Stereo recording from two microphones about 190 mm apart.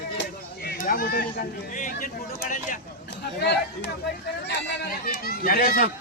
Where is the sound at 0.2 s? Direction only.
55° left (ahead or behind).